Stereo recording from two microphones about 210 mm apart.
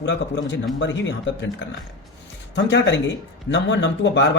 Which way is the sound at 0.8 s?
60° left (ahead or behind).